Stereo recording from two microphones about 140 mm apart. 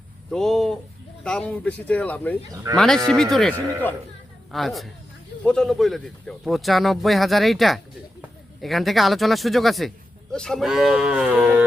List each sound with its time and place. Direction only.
0.3 s speech: 5° left (ahead or behind)
4.5 s speech: centre (ahead or behind)